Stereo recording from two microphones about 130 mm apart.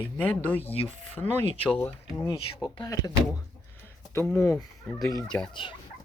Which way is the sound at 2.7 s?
30° left (ahead or behind).